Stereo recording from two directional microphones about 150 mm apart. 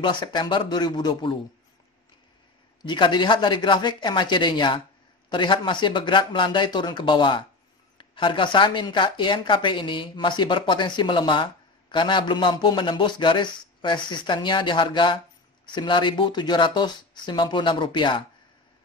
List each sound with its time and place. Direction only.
0.0 s speech: 30° left (ahead or behind)
2.8 s speech: 30° left (ahead or behind)